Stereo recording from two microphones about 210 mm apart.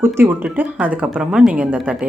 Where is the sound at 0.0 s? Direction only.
10° right (ahead or behind).